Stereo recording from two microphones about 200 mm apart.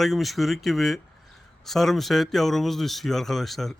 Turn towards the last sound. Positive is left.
turn(degrees=0)  # may be behind; listen again after turning